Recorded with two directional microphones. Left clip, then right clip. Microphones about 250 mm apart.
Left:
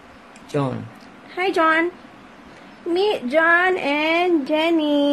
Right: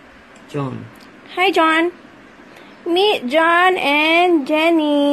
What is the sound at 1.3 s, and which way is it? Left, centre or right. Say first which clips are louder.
Speech: right 4 dB; centre.